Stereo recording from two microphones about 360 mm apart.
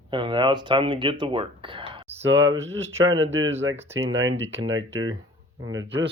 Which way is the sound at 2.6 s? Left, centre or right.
Right.